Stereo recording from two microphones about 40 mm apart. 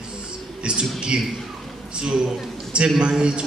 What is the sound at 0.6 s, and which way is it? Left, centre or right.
A man's voice, right.